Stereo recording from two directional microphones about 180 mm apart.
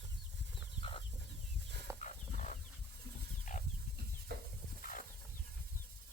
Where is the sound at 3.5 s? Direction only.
45° left (ahead or behind).